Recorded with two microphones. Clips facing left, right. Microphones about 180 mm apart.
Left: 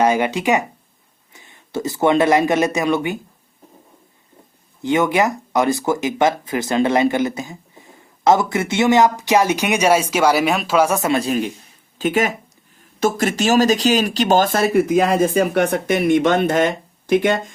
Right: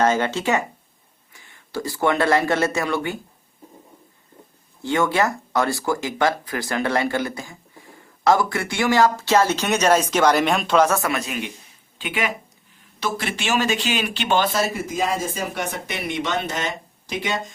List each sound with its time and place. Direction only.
0.0 s speech: 15° left (ahead or behind)
4.8 s speech: 20° left (ahead or behind)
11.1 s speech: 35° left (ahead or behind); by 17.4 s 55° left (ahead or behind)